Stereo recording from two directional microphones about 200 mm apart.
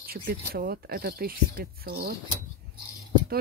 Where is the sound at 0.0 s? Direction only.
50° right (ahead or behind).